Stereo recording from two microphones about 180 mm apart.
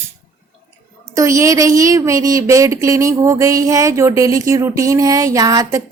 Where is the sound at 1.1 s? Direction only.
15° right (ahead or behind).